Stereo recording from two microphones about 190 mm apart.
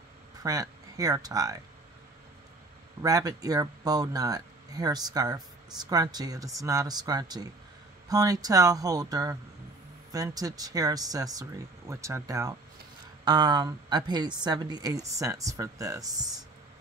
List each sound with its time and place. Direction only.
0.4 s speech: 20° right (ahead or behind)
3.0 s speech: 20° right (ahead or behind)